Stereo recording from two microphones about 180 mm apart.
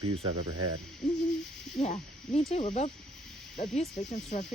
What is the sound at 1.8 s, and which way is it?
Snake, 35° left (ahead or behind).